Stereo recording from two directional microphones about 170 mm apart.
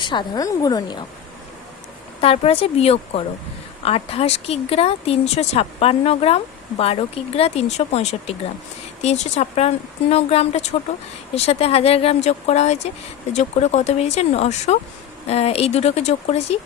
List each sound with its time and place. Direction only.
0.0 s a woman's voice: 25° left (ahead or behind)
2.2 s speech: 35° left (ahead or behind)